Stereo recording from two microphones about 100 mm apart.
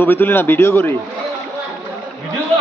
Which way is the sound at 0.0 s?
20° left (ahead or behind).